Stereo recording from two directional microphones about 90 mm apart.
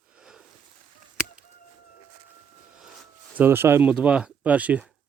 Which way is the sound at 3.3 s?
20° right (ahead or behind).